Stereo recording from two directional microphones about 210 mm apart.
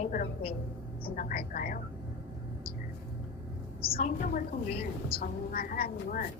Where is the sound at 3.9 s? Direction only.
25° left (ahead or behind).